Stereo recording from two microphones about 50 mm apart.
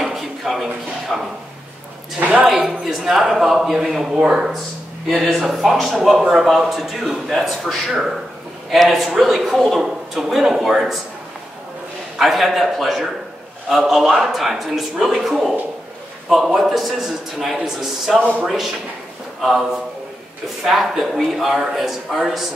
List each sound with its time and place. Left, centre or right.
0.0 s a sound: centre
1.1 s a man's voice: centre
2.1 s speech: right
2.4 s a man's voice: centre
12.2 s a man's voice: centre